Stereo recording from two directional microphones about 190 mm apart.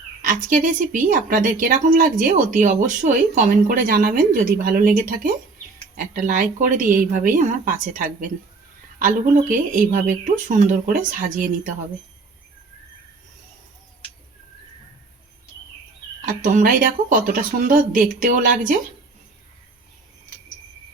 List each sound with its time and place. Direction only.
0.2 s speech: 45° right (ahead or behind)
16.2 s speech: 40° right (ahead or behind)